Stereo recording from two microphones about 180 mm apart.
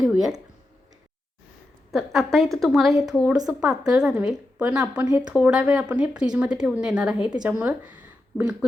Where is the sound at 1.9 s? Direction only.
Centre (ahead or behind).